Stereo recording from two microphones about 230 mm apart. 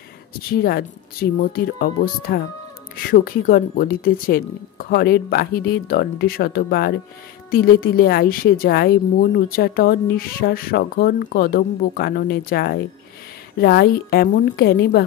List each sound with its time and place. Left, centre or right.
0.5 s a woman's voice: left